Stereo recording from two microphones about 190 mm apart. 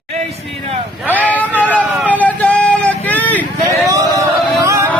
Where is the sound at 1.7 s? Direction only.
5° left (ahead or behind).